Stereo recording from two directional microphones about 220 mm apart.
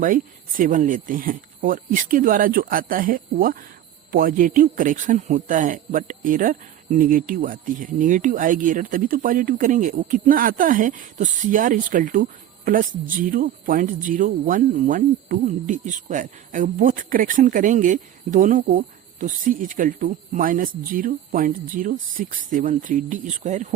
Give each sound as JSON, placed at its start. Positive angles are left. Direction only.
{"t": 0.0, "sound": "speech", "side_deg": -40}